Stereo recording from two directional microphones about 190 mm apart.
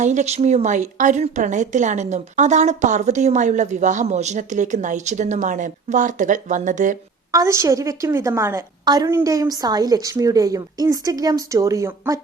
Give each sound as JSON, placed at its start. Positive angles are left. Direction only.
{"t": 0.0, "sound": "speech", "side_deg": -40}
{"t": 7.3, "sound": "a woman's voice", "side_deg": -15}